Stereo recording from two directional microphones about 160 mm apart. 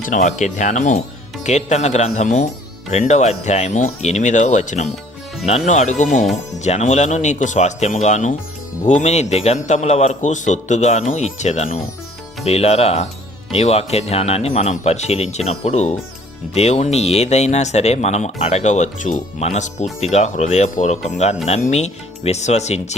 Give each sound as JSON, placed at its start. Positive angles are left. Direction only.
{"t": 0.0, "sound": "speech", "side_deg": 50}